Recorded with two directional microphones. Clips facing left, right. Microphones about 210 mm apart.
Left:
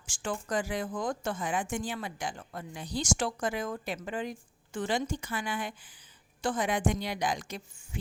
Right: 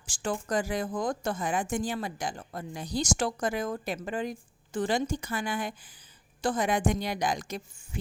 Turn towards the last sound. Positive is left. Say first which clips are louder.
# right 2 dB
turn(degrees=-40)  # may be behind; listen again after turning